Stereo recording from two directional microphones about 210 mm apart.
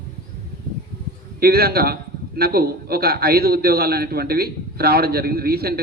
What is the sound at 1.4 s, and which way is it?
A man's voice, 45° right (ahead or behind).